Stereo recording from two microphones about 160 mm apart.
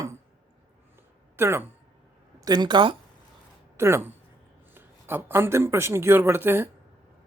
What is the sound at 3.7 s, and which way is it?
Speech, 15° right (ahead or behind).